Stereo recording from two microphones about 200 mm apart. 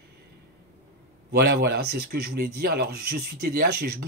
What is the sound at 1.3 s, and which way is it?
Speech, 50° right (ahead or behind).